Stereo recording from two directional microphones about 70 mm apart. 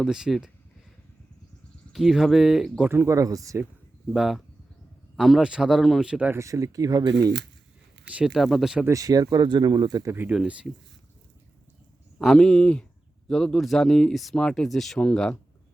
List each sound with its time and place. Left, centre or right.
0.1 s speech: centre
1.9 s speech: centre
3.1 s speech: right
4.1 s speech: centre
5.4 s speech: centre
6.3 s speech: right
8.1 s speech: centre
8.9 s speech: right
10.3 s speech: centre
12.2 s speech: centre